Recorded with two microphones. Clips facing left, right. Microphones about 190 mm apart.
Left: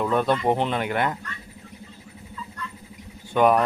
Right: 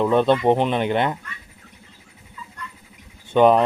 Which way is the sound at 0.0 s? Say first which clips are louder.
Right 5 dB; 25° right (ahead or behind).